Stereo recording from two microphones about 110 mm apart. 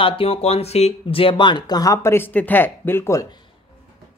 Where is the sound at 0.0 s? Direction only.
60° left (ahead or behind); by 3.3 s 25° left (ahead or behind).